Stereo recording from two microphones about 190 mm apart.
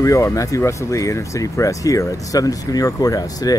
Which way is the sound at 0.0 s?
15° left (ahead or behind).